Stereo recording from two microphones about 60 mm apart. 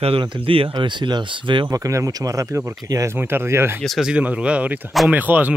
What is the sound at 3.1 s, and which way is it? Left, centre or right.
Speech, right.